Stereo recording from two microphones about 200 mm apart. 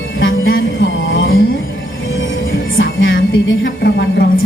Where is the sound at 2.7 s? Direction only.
70° left (ahead or behind).